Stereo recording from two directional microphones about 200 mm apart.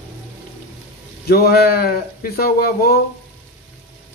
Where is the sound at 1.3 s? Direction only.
50° left (ahead or behind).